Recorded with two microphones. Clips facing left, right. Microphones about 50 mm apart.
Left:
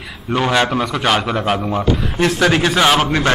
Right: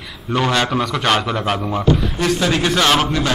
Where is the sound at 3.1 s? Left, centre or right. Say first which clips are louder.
Left 3 dB; left.